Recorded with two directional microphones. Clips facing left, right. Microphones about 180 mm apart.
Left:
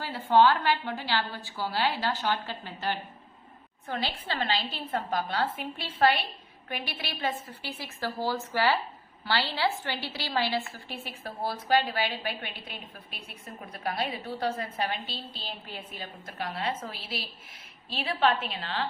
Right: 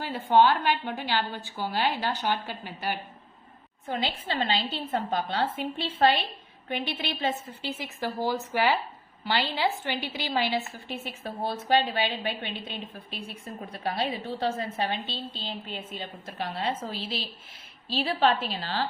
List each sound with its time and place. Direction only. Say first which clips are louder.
0.0 s a woman's voice: right 1 dB; 15° right (ahead or behind); by 18.9 s 35° right (ahead or behind)